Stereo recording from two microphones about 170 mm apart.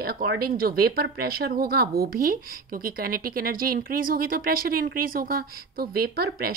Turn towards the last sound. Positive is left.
turn(degrees=-65)  # may be behind; listen again after turning